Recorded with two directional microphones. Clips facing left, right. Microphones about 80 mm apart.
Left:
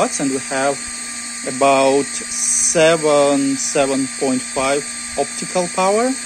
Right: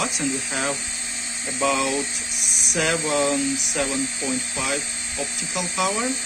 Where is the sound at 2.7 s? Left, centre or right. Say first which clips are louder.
Left 11 dB; left.